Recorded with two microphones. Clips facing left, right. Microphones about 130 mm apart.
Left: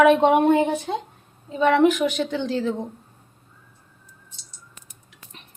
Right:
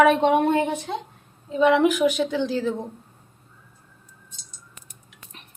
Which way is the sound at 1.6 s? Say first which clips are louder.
Even; 5° right (ahead or behind).